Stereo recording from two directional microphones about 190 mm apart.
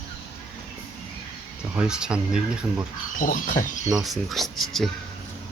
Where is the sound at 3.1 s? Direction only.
45° left (ahead or behind).